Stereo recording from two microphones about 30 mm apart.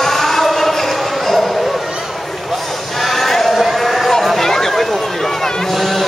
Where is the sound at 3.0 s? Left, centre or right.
Centre.